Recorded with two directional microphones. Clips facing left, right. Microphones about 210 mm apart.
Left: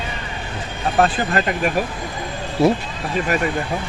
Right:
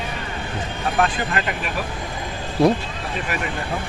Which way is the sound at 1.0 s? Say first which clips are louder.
Left 4 dB; 40° left (ahead or behind).